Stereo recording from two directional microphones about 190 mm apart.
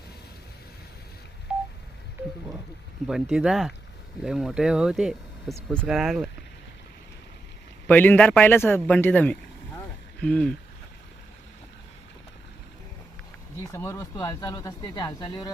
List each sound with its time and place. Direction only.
1.5 s telephone dialing: 5° right (ahead or behind)
3.1 s speech: centre (ahead or behind)
7.9 s a man's voice: 10° left (ahead or behind)
13.7 s speech: 15° left (ahead or behind)